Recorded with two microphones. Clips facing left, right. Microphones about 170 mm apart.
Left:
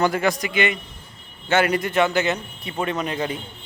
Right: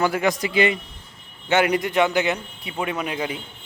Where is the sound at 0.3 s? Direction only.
30° right (ahead or behind).